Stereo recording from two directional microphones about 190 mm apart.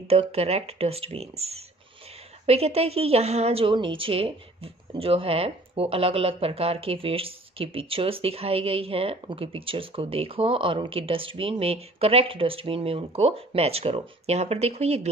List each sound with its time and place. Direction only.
0.1 s a woman's voice: 30° right (ahead or behind)